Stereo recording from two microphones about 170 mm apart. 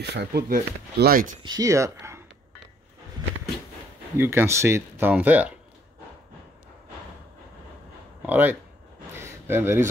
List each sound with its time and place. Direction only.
0.0 s speech: 80° right; by 1.4 s 55° right (ahead or behind)
1.4 s speech: 20° right (ahead or behind)
4.2 s speech: 15° right (ahead or behind)
8.3 s speech: 10° right (ahead or behind)
9.1 s a sound: 15° right (ahead or behind)